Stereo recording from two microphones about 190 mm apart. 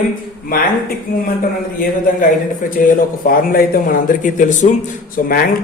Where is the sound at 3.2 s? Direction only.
50° left (ahead or behind).